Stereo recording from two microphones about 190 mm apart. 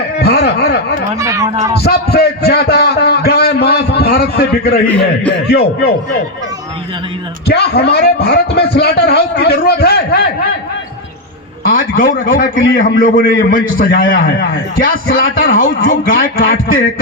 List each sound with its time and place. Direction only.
0.2 s a sound: 55° left (ahead or behind)
1.2 s speech: 15° right (ahead or behind)
1.8 s a man's voice: 60° left (ahead or behind)
7.4 s a man's voice: 60° left (ahead or behind)
11.6 s a man's voice: 45° left (ahead or behind)